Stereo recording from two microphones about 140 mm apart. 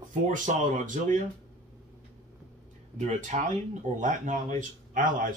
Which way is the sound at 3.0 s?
60° right (ahead or behind).